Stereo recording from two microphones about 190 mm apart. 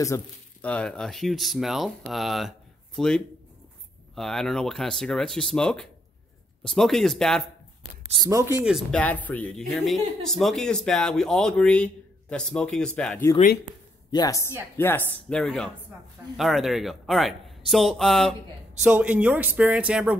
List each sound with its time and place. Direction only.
0.0 s speech: 10° left (ahead or behind)
8.1 s speech: 20° right (ahead or behind)
8.6 s speech: centre (ahead or behind)
9.0 s speech: 10° left (ahead or behind)
14.1 s a woman's voice: 20° left (ahead or behind); by 20.2 s 5° right (ahead or behind)